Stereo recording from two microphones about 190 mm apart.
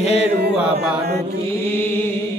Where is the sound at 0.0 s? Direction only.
35° left (ahead or behind).